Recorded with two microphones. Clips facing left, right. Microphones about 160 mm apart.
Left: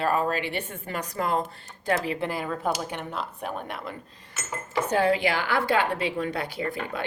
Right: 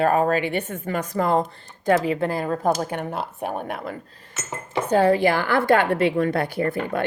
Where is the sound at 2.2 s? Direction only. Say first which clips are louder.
Right 6 dB; 40° right (ahead or behind).